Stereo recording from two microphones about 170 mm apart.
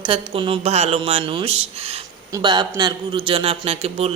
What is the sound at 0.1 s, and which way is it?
A woman's voice, 30° right (ahead or behind).